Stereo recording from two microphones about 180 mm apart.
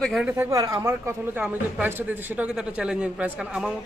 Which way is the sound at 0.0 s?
5° right (ahead or behind).